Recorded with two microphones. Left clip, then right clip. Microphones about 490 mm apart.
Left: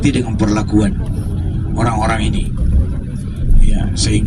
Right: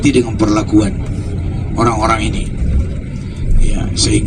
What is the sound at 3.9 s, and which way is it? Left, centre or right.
Speech, left.